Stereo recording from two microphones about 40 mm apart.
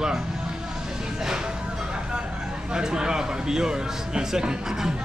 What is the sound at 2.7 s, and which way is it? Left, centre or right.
A man's voice, centre.